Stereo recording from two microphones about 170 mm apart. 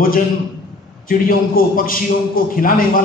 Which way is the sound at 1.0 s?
55° left (ahead or behind).